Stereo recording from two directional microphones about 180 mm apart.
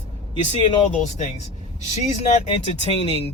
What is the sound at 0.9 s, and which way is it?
Speech, 40° left (ahead or behind).